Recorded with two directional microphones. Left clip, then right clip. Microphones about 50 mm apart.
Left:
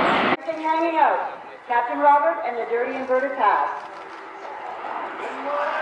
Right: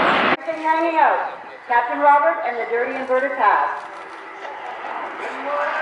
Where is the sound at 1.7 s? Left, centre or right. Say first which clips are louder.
Right 2 dB; centre.